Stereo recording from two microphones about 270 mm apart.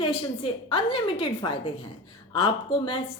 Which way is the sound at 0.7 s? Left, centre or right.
Centre.